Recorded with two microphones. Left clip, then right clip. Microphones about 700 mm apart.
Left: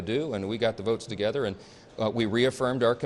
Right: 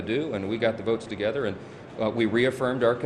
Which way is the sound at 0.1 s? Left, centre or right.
Left.